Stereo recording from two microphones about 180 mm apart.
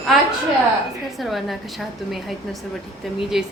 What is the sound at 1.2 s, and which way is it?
Speech, centre (ahead or behind).